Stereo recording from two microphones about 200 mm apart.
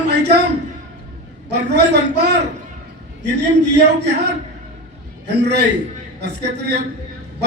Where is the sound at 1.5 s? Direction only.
60° right (ahead or behind).